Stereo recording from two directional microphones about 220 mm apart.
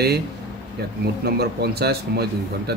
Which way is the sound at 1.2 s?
45° right (ahead or behind).